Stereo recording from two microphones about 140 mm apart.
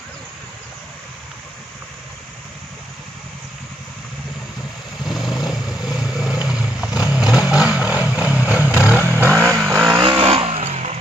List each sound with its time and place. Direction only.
5.0 s vehicle: centre (ahead or behind)
9.9 s vehicle: 35° right (ahead or behind); by 10.9 s 50° right (ahead or behind)